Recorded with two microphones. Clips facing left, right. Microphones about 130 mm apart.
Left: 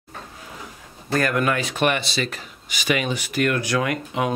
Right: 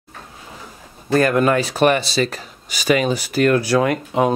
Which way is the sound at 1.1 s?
30° right (ahead or behind).